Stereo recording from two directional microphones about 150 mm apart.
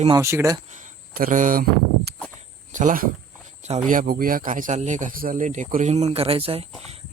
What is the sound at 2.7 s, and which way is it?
Speech, 60° right (ahead or behind).